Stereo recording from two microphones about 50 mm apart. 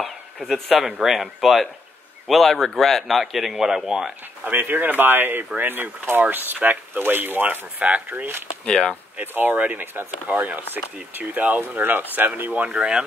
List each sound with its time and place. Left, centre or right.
0.0 s speech: centre
4.5 s speech: right
7.8 s speech: right
8.6 s speech: centre
9.2 s speech: right
12.7 s speech: centre